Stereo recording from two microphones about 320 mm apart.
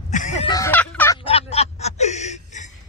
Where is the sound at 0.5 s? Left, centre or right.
Centre.